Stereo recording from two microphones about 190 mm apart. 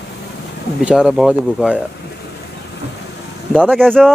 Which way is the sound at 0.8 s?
5° right (ahead or behind).